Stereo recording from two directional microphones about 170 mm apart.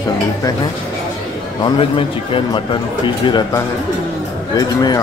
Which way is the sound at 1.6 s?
30° left (ahead or behind).